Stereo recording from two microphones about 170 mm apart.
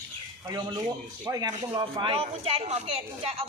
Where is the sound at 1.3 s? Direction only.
20° right (ahead or behind).